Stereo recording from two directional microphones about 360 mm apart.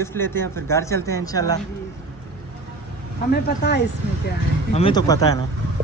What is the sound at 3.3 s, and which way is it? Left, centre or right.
Speech, left.